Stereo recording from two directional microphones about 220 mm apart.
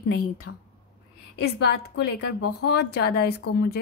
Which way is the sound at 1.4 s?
50° left (ahead or behind).